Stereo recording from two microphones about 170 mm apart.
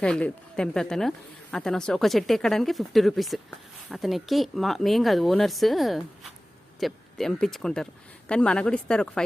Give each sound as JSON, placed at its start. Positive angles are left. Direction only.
{"t": 0.0, "sound": "a woman's voice", "side_deg": 5}